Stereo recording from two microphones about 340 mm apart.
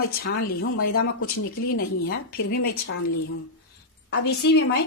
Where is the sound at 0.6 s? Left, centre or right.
Left.